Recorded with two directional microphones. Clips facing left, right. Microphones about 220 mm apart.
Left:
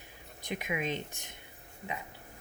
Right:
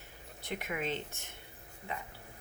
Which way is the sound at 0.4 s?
15° left (ahead or behind).